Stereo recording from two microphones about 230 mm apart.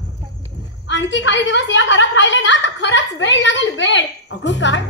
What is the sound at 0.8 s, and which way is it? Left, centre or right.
A woman's voice, left.